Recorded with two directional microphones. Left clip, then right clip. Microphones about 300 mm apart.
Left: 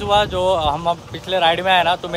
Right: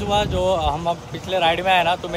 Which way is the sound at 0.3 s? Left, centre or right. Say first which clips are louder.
Left 3 dB; left.